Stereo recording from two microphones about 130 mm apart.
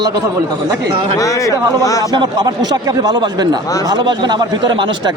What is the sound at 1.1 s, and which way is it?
Speech, 25° left (ahead or behind).